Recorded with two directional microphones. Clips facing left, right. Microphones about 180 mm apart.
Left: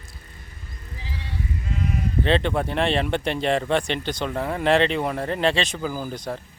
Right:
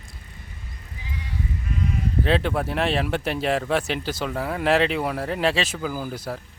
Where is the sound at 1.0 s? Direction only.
30° left (ahead or behind).